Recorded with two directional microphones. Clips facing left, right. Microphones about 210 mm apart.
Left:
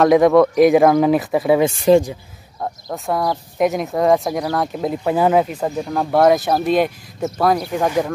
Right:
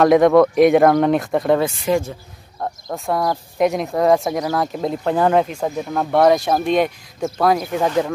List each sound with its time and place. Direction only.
0.0 s speech: centre (ahead or behind)
1.9 s speech: 35° left (ahead or behind)
2.6 s speech: centre (ahead or behind)